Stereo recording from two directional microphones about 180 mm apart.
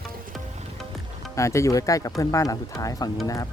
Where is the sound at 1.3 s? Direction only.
15° left (ahead or behind).